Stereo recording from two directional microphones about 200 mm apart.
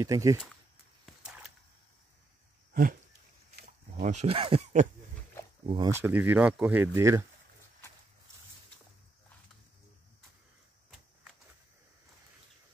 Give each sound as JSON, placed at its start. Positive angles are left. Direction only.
{"t": 0.0, "sound": "speech", "side_deg": -15}
{"t": 1.2, "sound": "a sound", "side_deg": -5}
{"t": 2.7, "sound": "dog", "side_deg": -45}
{"t": 4.0, "sound": "speech", "side_deg": -35}
{"t": 5.9, "sound": "speech", "side_deg": -10}